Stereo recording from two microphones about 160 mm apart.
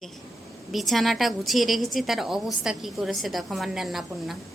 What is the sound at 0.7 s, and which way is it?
A woman's voice, centre (ahead or behind).